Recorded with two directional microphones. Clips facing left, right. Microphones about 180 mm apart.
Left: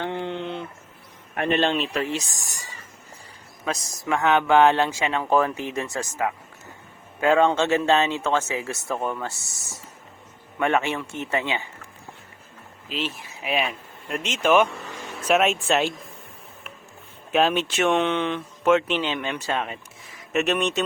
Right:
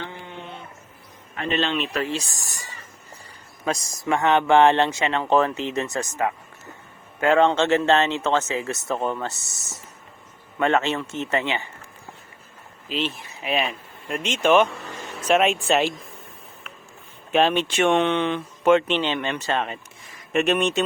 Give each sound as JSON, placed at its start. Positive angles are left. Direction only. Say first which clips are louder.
{"t": 0.0, "sound": "a sound", "louder": "left 8 dB", "side_deg": 65}
{"t": 1.4, "sound": "speech", "louder": "left 2 dB", "side_deg": 55}
{"t": 3.7, "sound": "speech", "louder": "right 2 dB", "side_deg": 0}
{"t": 8.2, "sound": "speech", "louder": "right 1 dB", "side_deg": -20}
{"t": 8.4, "sound": "speech", "louder": "right 2 dB", "side_deg": 15}
{"t": 8.9, "sound": "speech", "louder": "right 2 dB", "side_deg": -20}
{"t": 10.6, "sound": "speech", "louder": "right 2 dB", "side_deg": 15}
{"t": 12.9, "sound": "speech", "louder": "right 3 dB", "side_deg": 5}
{"t": 17.3, "sound": "speech", "louder": "right 1 dB", "side_deg": 5}